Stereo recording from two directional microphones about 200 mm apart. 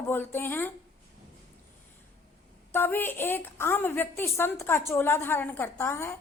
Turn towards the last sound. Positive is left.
turn(degrees=10)  # may be behind; listen again after turning